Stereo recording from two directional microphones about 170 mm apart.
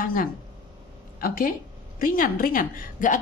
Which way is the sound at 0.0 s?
55° left (ahead or behind).